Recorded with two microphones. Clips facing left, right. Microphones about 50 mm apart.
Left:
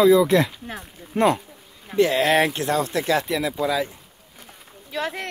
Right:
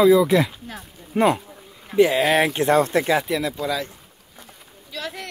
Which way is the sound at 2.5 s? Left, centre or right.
Right.